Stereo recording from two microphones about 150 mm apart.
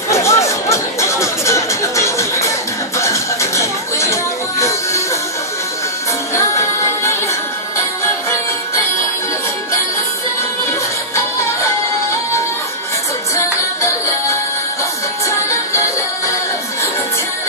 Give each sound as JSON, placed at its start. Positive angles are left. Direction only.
{"t": 0.1, "sound": "music", "side_deg": 20}